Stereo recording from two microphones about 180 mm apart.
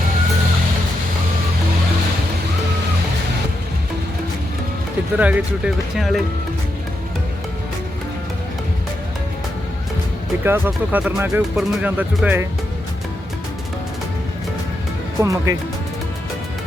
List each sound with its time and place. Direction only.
5.1 s speech: 10° right (ahead or behind)
10.4 s speech: 10° right (ahead or behind)
15.2 s speech: 20° right (ahead or behind)